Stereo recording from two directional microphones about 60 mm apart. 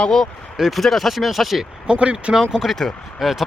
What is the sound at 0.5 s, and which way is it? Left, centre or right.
Speech, centre.